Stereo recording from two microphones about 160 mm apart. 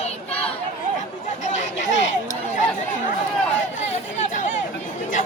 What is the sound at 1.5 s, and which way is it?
Chatter, 45° left (ahead or behind).